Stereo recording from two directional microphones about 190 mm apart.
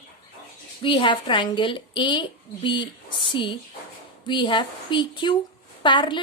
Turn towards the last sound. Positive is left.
turn(degrees=25)  # may be behind; listen again after turning